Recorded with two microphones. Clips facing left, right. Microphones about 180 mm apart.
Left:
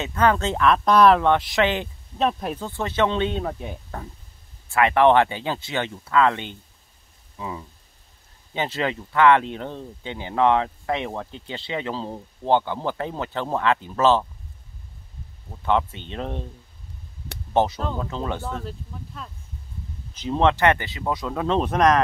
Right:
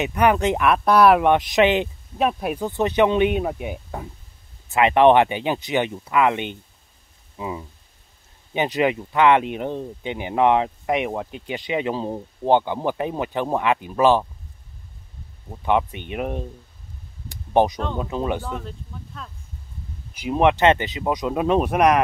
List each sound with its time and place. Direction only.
0.0 s speech: 15° right (ahead or behind)
7.3 s rain on surface: 15° right (ahead or behind)
8.5 s speech: 15° right (ahead or behind)
15.5 s speech: 15° right (ahead or behind)
17.5 s speech: 15° right (ahead or behind)
18.6 s speech: 5° left (ahead or behind)
20.2 s speech: 15° right (ahead or behind)